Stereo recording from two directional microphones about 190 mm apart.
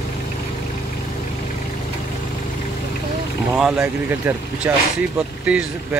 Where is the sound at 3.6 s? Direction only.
5° right (ahead or behind).